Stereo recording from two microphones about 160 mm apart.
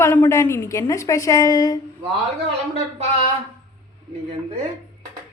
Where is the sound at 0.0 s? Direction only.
15° left (ahead or behind).